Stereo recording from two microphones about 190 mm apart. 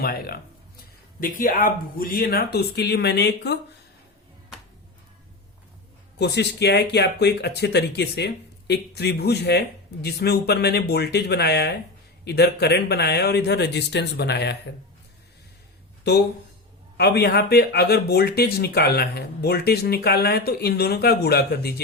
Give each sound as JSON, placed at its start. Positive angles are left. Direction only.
{"t": 0.0, "sound": "speech", "side_deg": 55}
{"t": 6.1, "sound": "speech", "side_deg": 65}
{"t": 17.0, "sound": "speech", "side_deg": 60}